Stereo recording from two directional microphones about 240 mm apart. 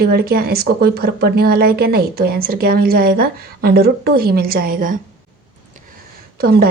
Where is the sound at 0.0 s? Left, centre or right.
Right.